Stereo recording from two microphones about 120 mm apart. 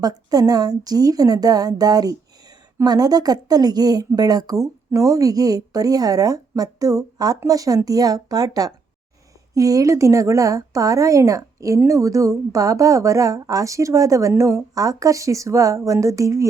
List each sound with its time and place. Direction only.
0.0 s speech: 35° right (ahead or behind)